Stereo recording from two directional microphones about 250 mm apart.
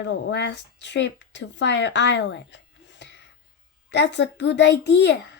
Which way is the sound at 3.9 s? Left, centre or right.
Left.